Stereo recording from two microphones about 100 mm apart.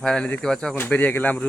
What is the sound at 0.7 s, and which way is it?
Speech, 20° left (ahead or behind).